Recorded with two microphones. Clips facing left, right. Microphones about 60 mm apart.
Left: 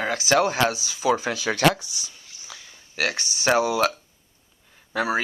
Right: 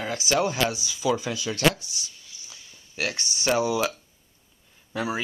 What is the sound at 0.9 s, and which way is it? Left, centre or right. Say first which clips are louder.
Speech: left 3 dB; left.